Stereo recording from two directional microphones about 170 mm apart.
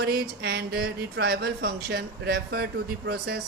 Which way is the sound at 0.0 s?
75° right (ahead or behind).